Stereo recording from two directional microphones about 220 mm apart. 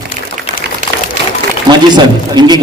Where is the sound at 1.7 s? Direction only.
20° right (ahead or behind).